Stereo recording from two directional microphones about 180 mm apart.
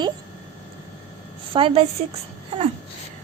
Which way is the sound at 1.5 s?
30° right (ahead or behind).